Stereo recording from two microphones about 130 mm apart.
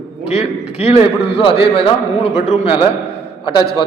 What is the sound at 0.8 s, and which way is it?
A man's voice, 50° left (ahead or behind).